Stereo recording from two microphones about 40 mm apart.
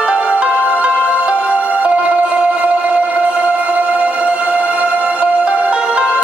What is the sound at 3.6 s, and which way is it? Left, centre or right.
Music, right.